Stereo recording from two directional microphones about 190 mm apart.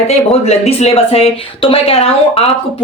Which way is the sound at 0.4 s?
35° left (ahead or behind).